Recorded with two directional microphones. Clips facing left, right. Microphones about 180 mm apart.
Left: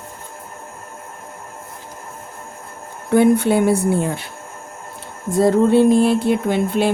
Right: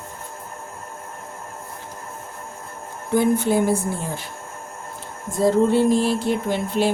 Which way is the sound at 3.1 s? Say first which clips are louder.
Left 5 dB; 65° left (ahead or behind).